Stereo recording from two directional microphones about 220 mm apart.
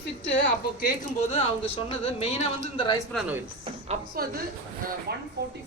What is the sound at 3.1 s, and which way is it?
Speech, 5° right (ahead or behind).